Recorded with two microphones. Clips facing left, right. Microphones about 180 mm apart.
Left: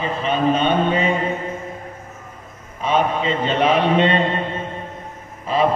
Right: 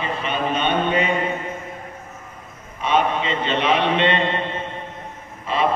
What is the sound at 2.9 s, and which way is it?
A man's voice, 40° left (ahead or behind).